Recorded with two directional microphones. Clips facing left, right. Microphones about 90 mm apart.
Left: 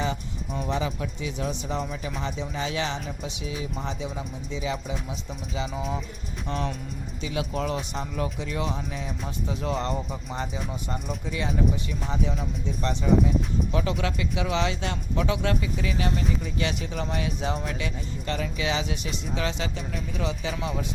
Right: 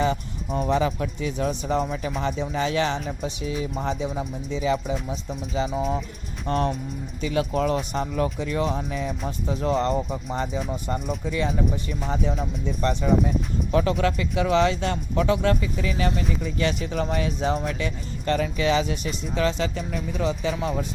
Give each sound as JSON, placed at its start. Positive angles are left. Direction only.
{"t": 0.0, "sound": "speech", "side_deg": -45}
{"t": 6.5, "sound": "speech", "side_deg": -50}
{"t": 9.5, "sound": "speech", "side_deg": -35}